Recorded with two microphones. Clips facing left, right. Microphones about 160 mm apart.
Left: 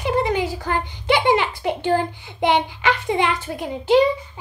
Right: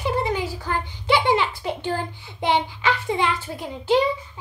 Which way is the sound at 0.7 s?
60° left (ahead or behind).